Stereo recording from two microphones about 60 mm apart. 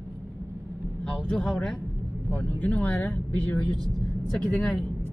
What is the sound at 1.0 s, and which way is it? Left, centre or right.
Speech, centre.